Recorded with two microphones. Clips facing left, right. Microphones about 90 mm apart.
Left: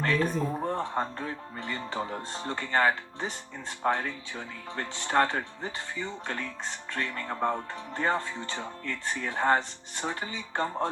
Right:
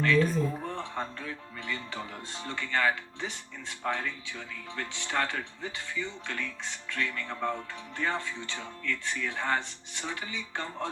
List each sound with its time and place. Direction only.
0.0 s speech: 40° left (ahead or behind)